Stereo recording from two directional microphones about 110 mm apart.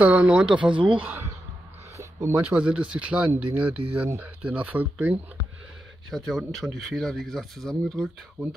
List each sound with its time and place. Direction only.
0.0 s speech: 10° right (ahead or behind)
0.7 s speech: 50° right (ahead or behind)
1.0 s a sound: 15° right (ahead or behind)
2.5 s speech: 10° right (ahead or behind)
6.0 s speech: centre (ahead or behind)